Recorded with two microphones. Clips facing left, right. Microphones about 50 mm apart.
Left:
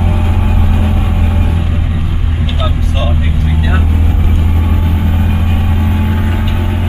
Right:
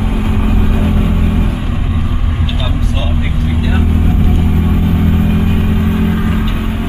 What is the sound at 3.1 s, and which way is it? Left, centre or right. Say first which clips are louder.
Vehicle: even; centre.